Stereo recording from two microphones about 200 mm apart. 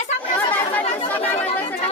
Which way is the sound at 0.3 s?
10° left (ahead or behind).